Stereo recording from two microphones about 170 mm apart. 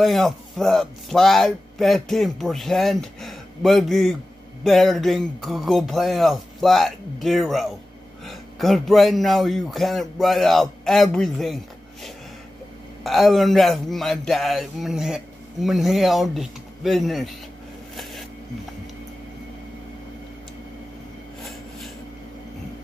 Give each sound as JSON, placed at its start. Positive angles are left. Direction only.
{"t": 0.0, "sound": "speech", "side_deg": 0}